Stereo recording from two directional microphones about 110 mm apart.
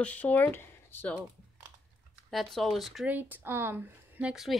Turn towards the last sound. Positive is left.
turn(degrees=-10)  # may be behind; listen again after turning